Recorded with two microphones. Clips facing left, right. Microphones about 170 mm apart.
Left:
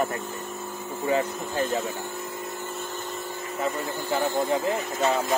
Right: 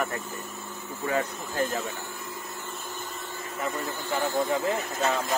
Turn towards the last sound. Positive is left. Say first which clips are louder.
# left 3 dB
turn(degrees=15)  # may be behind; listen again after turning